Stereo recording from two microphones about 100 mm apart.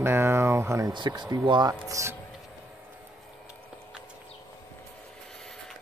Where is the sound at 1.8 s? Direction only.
30° right (ahead or behind).